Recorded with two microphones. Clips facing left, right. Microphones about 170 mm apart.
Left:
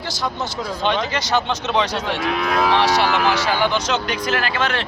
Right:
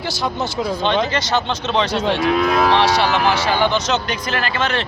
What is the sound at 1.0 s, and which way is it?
A man's voice, 15° left (ahead or behind).